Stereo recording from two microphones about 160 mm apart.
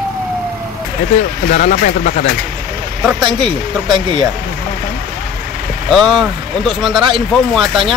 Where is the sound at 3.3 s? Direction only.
30° right (ahead or behind).